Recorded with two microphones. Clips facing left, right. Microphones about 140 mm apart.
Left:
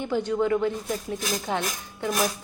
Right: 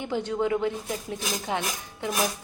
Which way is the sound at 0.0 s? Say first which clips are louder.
Left 2 dB; 20° right (ahead or behind).